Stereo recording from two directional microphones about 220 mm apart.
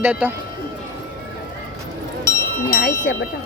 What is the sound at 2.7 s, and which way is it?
Bell, 40° left (ahead or behind).